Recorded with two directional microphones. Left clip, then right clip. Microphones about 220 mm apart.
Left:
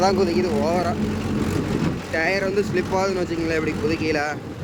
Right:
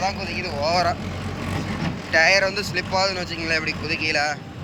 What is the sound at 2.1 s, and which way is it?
Speech, 10° left (ahead or behind).